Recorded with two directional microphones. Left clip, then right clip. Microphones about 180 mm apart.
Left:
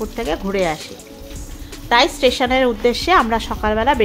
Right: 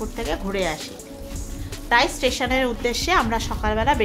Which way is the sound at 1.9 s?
30° left (ahead or behind).